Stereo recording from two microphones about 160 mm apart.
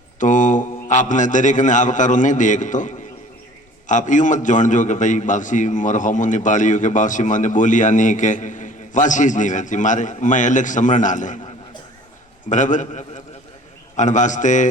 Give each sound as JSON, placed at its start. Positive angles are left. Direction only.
{"t": 0.2, "sound": "a man's voice", "side_deg": 55}
{"t": 12.5, "sound": "a man's voice", "side_deg": 50}